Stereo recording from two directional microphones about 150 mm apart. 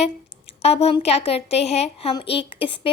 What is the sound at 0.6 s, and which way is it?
A woman's voice, 45° left (ahead or behind).